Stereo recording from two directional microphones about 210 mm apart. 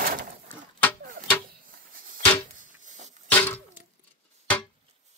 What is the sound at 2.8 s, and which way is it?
Music, 35° right (ahead or behind).